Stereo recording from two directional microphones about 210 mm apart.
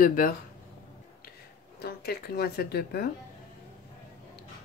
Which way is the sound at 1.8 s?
50° left (ahead or behind).